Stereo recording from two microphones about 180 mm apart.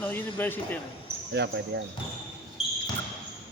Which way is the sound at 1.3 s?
75° right (ahead or behind).